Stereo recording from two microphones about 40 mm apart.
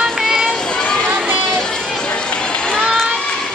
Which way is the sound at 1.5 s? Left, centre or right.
Centre.